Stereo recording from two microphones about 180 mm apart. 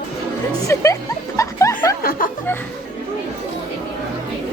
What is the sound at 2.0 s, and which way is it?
Speech, 55° left (ahead or behind).